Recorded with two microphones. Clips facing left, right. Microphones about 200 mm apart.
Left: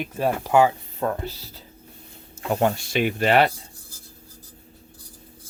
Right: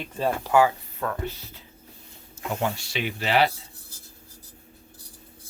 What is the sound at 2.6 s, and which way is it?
Speech, 50° left (ahead or behind).